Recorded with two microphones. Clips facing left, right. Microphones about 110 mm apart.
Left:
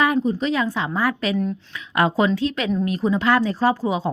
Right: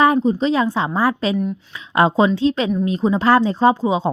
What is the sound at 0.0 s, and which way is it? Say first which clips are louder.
A woman's voice: right 4 dB; 30° right (ahead or behind).